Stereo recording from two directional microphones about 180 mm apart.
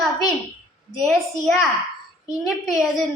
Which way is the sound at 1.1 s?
Centre (ahead or behind).